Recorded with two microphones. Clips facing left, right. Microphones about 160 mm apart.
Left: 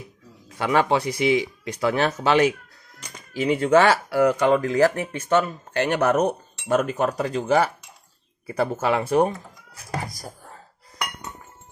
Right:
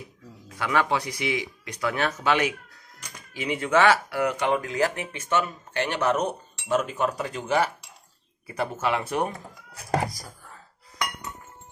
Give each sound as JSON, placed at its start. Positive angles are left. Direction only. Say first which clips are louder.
{"t": 0.6, "sound": "speech", "louder": "left 4 dB", "side_deg": 30}
{"t": 10.2, "sound": "wail", "louder": "left 6 dB", "side_deg": 40}